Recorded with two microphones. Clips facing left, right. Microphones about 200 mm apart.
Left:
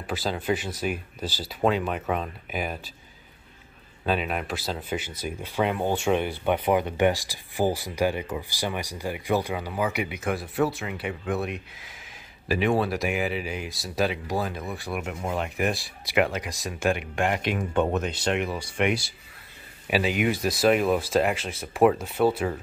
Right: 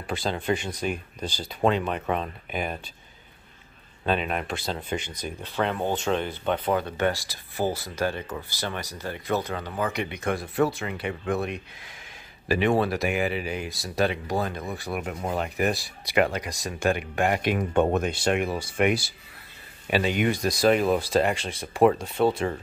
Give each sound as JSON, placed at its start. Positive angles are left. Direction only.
{"t": 0.0, "sound": "speech", "side_deg": 5}
{"t": 4.0, "sound": "speech", "side_deg": 5}
{"t": 17.2, "sound": "speech", "side_deg": -45}
{"t": 19.9, "sound": "speech", "side_deg": 5}